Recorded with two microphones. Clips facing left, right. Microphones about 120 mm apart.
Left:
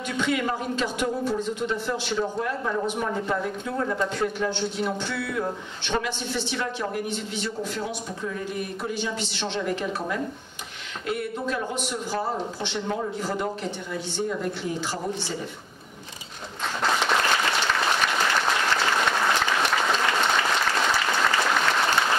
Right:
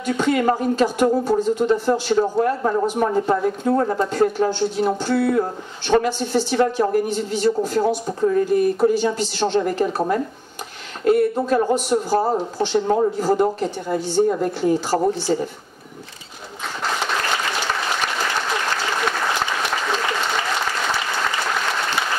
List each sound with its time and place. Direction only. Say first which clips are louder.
0.0 s speech: right 7 dB; 40° right (ahead or behind)